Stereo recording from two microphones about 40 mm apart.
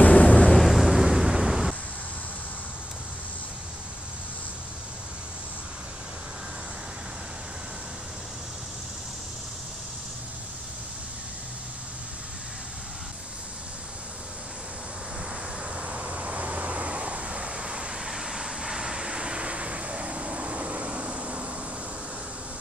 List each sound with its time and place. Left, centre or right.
0.0 s vehicle: left
0.5 s vehicle: centre
15.6 s vehicle: right
17.9 s vehicle: centre; by 21.5 s right